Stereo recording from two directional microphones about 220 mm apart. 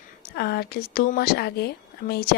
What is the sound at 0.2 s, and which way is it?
Speech, 45° left (ahead or behind).